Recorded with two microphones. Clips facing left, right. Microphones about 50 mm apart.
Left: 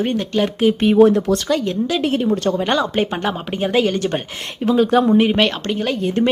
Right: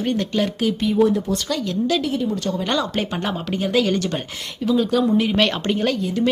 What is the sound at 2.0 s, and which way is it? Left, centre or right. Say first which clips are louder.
Speech: left 5 dB; left.